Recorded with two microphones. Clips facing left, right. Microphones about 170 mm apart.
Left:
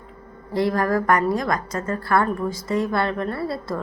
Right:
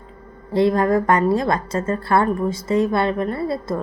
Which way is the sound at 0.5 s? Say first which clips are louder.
Right 4 dB; 25° right (ahead or behind).